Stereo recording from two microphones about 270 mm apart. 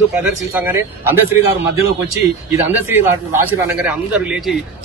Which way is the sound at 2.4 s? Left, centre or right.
Centre.